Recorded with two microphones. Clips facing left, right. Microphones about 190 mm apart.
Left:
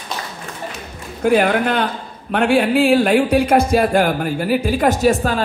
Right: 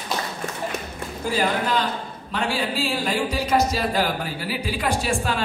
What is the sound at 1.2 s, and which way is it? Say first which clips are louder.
A man's voice: left 9 dB; 65° left (ahead or behind).